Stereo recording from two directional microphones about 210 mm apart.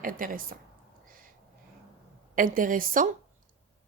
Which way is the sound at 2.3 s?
40° right (ahead or behind).